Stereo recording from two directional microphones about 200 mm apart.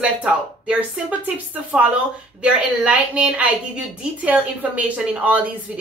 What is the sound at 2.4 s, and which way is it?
A woman's voice, 5° right (ahead or behind).